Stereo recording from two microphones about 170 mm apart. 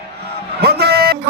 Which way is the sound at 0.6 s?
70° right (ahead or behind).